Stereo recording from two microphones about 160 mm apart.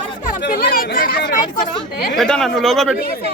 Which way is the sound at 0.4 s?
70° left (ahead or behind).